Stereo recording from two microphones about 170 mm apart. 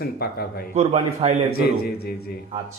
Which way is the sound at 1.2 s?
35° right (ahead or behind).